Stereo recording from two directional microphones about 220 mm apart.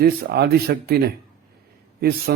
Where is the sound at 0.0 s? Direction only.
45° right (ahead or behind).